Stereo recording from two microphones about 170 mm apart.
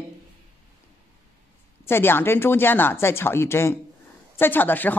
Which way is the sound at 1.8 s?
15° left (ahead or behind).